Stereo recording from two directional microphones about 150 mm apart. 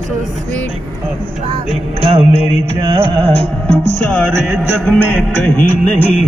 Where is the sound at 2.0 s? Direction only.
50° right (ahead or behind).